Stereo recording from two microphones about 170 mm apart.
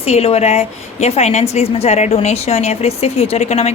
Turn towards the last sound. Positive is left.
turn(degrees=40)  # may be behind; listen again after turning